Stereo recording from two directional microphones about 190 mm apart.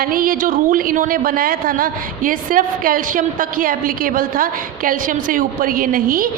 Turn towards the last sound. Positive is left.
turn(degrees=-45)  # may be behind; listen again after turning